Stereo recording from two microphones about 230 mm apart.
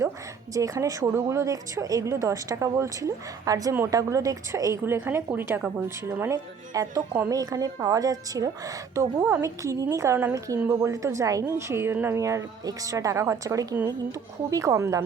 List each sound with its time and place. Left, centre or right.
0.5 s speech: centre